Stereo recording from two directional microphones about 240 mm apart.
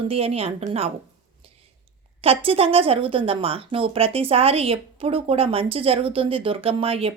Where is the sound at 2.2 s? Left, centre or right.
Right.